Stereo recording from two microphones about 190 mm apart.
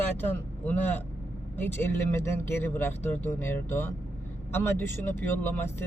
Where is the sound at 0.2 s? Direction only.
10° left (ahead or behind).